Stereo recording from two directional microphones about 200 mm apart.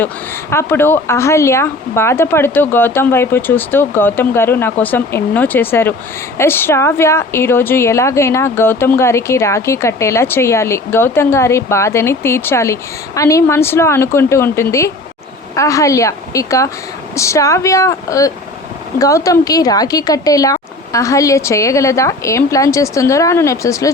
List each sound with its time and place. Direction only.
0.5 s a woman's voice: 10° left (ahead or behind)